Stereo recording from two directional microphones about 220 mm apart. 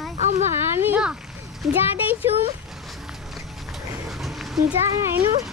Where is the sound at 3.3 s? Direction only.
Centre (ahead or behind).